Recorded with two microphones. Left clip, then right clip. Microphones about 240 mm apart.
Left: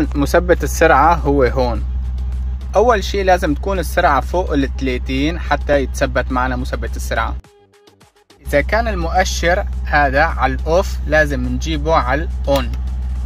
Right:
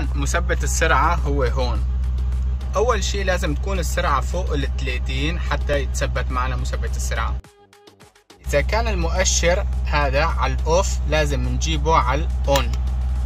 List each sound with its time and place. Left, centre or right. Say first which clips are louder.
0.0 s speech: left 10 dB; centre
2.7 s speech: left 7 dB; centre
8.5 s speech: left 5 dB; centre